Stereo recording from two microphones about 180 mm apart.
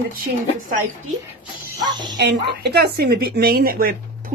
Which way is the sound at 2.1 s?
70° right (ahead or behind).